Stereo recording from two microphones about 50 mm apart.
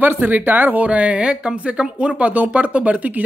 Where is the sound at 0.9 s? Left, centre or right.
Right.